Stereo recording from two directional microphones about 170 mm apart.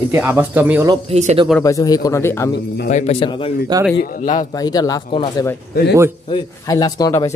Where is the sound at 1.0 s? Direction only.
40° right (ahead or behind).